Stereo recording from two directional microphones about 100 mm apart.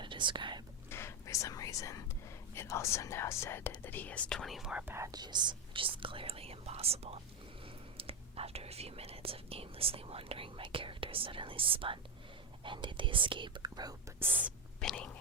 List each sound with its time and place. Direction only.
0.0 s whispering: 55° right (ahead or behind)
0.9 s whispering: 25° left (ahead or behind)
2.6 s speech: 30° left (ahead or behind); by 4.9 s 10° right (ahead or behind)
5.1 s speech: 45° right (ahead or behind); by 7.2 s 85° right
7.9 s speech: 75° right (ahead or behind); by 13.9 s 45° right (ahead or behind)
14.2 s speech: 15° right (ahead or behind)
14.8 s whispering: 10° left (ahead or behind)